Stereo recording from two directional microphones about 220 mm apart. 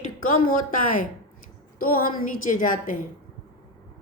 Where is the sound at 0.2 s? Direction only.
35° left (ahead or behind).